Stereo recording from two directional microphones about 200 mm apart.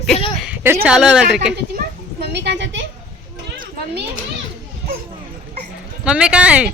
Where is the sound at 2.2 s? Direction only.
60° right (ahead or behind).